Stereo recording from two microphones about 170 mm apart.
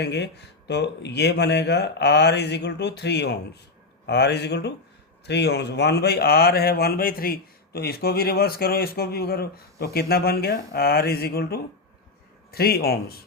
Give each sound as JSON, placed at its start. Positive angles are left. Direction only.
{"t": 0.0, "sound": "speech", "side_deg": 80}